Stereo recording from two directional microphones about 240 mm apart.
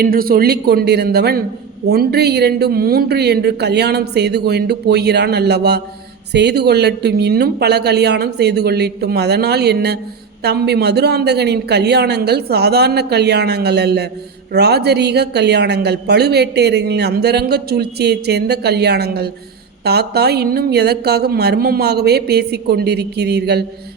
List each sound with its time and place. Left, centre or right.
0.0 s a man's voice: right